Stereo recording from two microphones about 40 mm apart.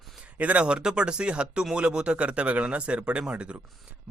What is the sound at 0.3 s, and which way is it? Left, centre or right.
Speech, right.